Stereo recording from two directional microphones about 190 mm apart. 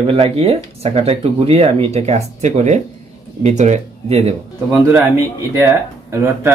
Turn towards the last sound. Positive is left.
turn(degrees=-15)  # may be behind; listen again after turning